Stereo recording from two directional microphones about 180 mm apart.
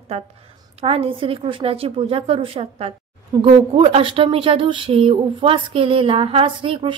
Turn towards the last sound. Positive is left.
turn(degrees=-30)  # may be behind; listen again after turning